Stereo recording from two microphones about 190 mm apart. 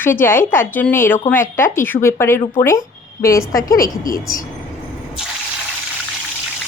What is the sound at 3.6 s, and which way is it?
Speech, 50° left (ahead or behind).